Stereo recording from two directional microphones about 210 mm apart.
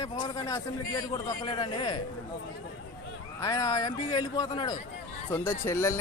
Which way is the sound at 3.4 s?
15° left (ahead or behind).